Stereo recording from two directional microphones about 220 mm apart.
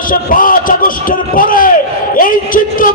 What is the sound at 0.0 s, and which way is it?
A man's voice, 40° left (ahead or behind).